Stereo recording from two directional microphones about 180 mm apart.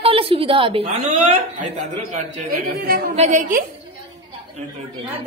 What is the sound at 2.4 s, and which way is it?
Speech, 55° right (ahead or behind).